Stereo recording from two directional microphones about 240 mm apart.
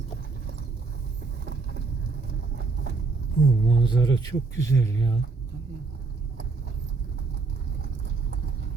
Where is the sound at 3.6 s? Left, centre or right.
Centre.